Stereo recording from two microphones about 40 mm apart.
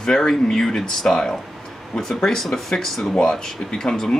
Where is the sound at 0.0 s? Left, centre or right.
Centre.